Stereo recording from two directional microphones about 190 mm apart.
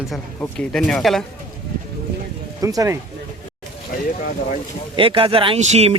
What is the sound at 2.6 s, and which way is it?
Speech, 15° right (ahead or behind).